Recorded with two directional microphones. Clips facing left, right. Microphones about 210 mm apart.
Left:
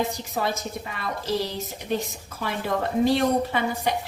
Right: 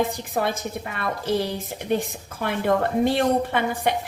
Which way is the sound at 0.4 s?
55° right (ahead or behind).